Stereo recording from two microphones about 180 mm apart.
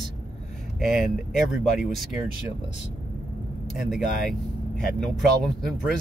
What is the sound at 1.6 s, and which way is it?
Speech, centre (ahead or behind).